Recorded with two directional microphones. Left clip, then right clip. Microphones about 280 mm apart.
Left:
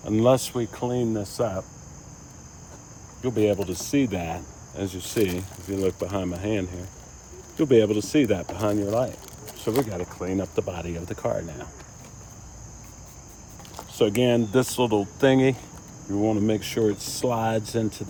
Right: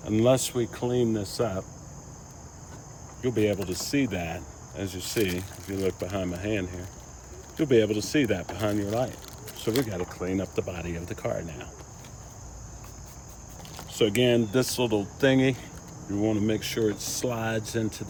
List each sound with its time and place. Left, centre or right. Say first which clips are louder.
0.0 s speech: left 3 dB; centre
3.2 s speech: left 3 dB; centre
14.0 s speech: left 2 dB; centre